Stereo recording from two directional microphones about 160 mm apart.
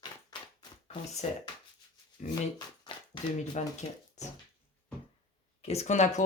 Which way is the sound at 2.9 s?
30° left (ahead or behind).